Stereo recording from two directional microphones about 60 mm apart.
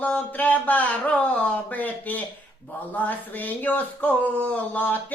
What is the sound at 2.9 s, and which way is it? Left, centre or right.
Speech, left.